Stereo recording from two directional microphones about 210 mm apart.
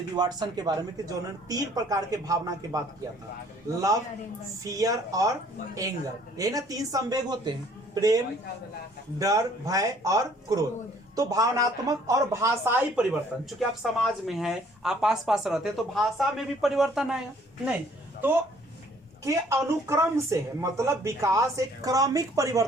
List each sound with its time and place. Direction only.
0.2 s speech: 20° right (ahead or behind)
4.6 s speech: 15° right (ahead or behind)
19.2 s speech: 15° right (ahead or behind)